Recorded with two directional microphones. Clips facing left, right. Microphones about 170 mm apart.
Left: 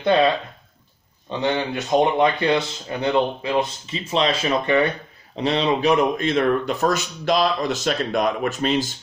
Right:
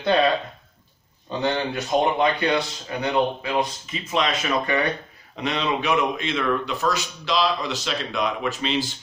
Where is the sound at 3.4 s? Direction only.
30° left (ahead or behind).